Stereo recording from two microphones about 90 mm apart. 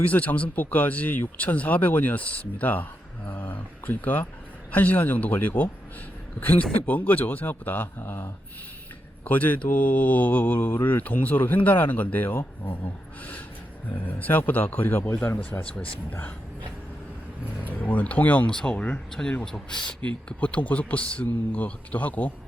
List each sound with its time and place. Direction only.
0.0 s speech: 15° left (ahead or behind)
14.2 s speech: 20° left (ahead or behind)
17.7 s speech: 20° left (ahead or behind)